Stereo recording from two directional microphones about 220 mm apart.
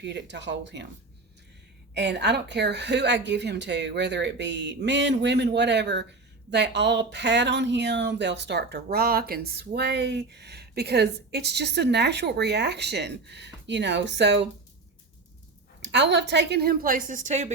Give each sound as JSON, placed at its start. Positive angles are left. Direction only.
{"t": 0.0, "sound": "speech", "side_deg": -50}
{"t": 1.9, "sound": "speech", "side_deg": -50}
{"t": 15.8, "sound": "speech", "side_deg": -50}